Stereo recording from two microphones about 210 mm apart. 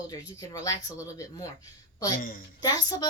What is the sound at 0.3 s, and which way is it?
Speech, 15° left (ahead or behind).